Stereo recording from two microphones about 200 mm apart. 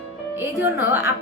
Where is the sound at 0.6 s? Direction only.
10° right (ahead or behind).